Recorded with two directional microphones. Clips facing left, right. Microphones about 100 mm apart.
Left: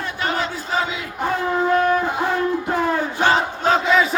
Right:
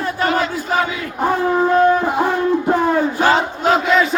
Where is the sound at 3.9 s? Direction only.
5° left (ahead or behind).